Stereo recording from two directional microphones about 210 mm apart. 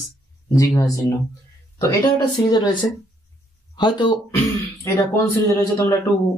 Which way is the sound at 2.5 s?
20° left (ahead or behind).